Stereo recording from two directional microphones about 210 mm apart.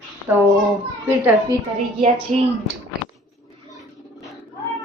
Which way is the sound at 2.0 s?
25° right (ahead or behind).